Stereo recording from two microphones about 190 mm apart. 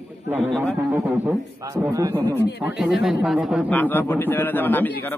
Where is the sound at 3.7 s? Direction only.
10° left (ahead or behind).